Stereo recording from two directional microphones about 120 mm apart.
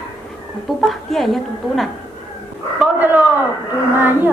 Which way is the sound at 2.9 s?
15° right (ahead or behind).